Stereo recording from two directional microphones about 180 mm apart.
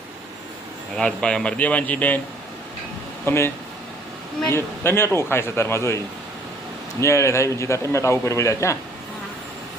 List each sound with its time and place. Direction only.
0.9 s a man's voice: 5° left (ahead or behind)
3.2 s a man's voice: 15° left (ahead or behind)
7.0 s a man's voice: 15° left (ahead or behind)